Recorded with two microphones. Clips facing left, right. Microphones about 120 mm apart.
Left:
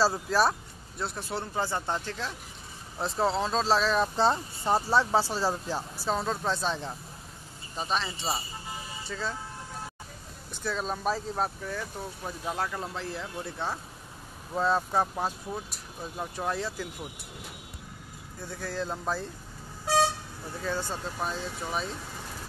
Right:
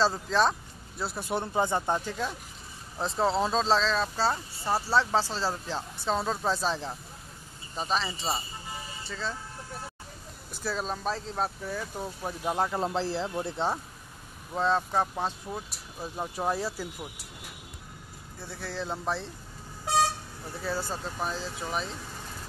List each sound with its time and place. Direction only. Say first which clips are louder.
0.0 s speech: even; 10° left (ahead or behind)
1.3 s speech: right 5 dB; 20° right (ahead or behind)
3.0 s speech: right 1 dB; centre (ahead or behind)
3.8 s speech: left 3 dB; 15° left (ahead or behind)
10.5 s speech: even; 5° right (ahead or behind)
11.6 s speech: right 1 dB; 10° right (ahead or behind); by 13.7 s 25° right (ahead or behind)
14.5 s speech: even; 5° left (ahead or behind)
18.4 s speech: left 2 dB; centre (ahead or behind)
20.6 s speech: even; 5° right (ahead or behind)